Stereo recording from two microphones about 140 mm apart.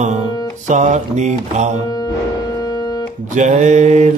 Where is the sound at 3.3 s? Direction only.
60° right (ahead or behind).